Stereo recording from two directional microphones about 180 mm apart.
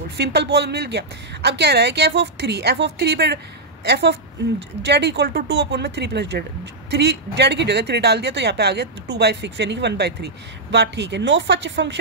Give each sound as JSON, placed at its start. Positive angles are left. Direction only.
{"t": 0.2, "sound": "a woman's voice", "side_deg": -65}